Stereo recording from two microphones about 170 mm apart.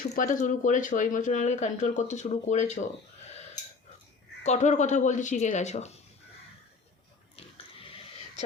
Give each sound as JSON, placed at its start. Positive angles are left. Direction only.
{"t": 0.0, "sound": "speech", "side_deg": 50}
{"t": 4.4, "sound": "speech", "side_deg": 45}
{"t": 7.3, "sound": "oink", "side_deg": 35}